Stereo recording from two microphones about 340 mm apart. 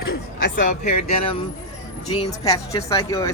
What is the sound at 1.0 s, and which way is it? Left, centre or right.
Speech, centre.